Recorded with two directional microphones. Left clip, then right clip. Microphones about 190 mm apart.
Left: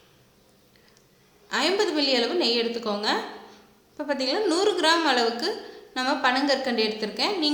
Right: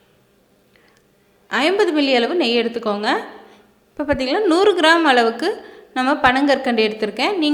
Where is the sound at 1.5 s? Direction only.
30° right (ahead or behind).